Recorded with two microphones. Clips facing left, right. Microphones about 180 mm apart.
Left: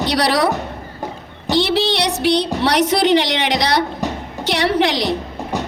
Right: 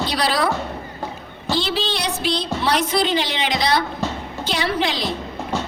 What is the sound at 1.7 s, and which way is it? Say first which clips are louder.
A woman's voice: left 6 dB; 70° left (ahead or behind).